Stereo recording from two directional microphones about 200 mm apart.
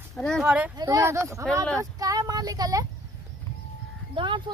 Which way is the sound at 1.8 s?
15° right (ahead or behind).